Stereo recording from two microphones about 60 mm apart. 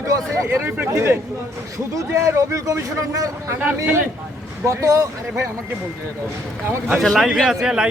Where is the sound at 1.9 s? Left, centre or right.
Right.